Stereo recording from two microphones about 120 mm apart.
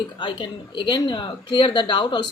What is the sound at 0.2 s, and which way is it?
A woman's voice, 40° left (ahead or behind).